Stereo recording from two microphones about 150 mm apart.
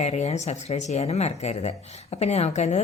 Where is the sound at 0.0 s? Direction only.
50° left (ahead or behind).